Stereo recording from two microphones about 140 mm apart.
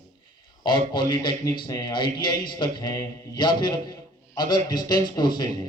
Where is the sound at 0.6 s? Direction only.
35° left (ahead or behind).